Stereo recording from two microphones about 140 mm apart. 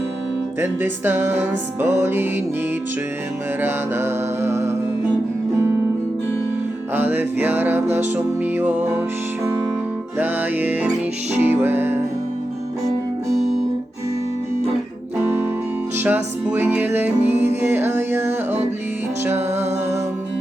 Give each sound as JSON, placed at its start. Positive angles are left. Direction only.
{"t": 0.6, "sound": "music", "side_deg": -15}
{"t": 3.6, "sound": "music", "side_deg": -15}
{"t": 6.9, "sound": "music", "side_deg": -15}
{"t": 16.0, "sound": "music", "side_deg": -10}